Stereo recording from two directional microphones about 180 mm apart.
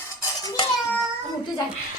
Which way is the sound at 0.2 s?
20° left (ahead or behind).